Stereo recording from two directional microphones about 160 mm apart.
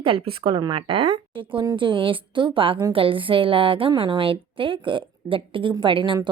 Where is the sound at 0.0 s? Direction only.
35° right (ahead or behind).